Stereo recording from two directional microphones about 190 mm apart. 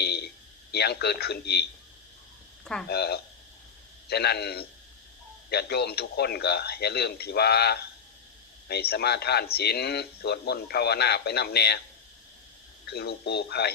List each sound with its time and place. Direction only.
0.0 s a sound: 55° left (ahead or behind)
0.7 s speech: 60° left (ahead or behind)
2.8 s speech: 60° left (ahead or behind)
12.8 s speech: 60° left (ahead or behind)